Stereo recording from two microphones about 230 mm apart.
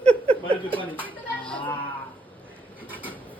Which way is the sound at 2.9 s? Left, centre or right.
Centre.